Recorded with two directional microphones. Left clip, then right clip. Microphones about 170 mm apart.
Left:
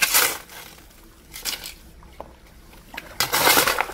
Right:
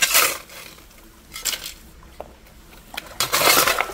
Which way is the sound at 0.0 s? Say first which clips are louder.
Right 2 dB; 20° left (ahead or behind).